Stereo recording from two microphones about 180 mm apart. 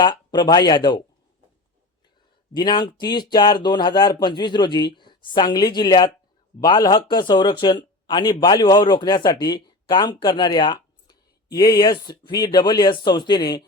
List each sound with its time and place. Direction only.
0.0 s speech: 25° left (ahead or behind)
2.5 s speech: 25° left (ahead or behind)